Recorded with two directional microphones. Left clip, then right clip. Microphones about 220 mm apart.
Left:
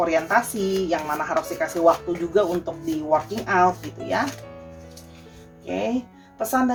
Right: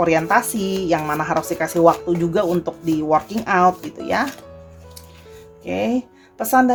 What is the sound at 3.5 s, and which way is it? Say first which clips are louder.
Speech: right 3 dB; 45° right (ahead or behind).